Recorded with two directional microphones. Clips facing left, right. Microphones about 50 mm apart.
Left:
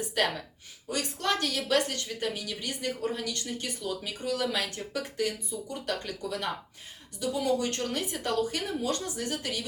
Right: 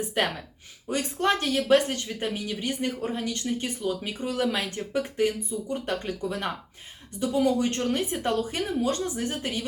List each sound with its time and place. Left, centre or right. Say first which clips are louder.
0.2 s speech: right 1 dB; right